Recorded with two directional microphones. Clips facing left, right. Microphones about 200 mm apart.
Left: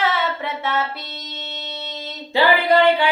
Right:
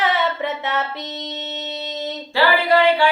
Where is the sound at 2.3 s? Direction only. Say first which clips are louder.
Left 1 dB; 20° left (ahead or behind).